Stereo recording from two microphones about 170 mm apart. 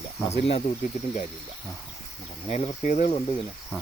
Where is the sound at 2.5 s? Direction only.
40° left (ahead or behind).